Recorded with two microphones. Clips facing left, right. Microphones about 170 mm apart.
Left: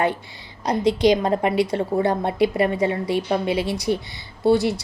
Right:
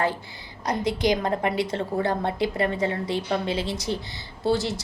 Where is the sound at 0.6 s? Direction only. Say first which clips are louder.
Left 6 dB; 20° left (ahead or behind).